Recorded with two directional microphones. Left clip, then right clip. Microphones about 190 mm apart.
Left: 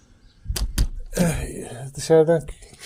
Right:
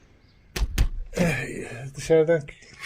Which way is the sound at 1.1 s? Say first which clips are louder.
Even; 20° left (ahead or behind).